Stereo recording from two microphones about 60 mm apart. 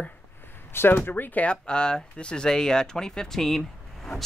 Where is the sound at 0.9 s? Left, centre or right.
Left.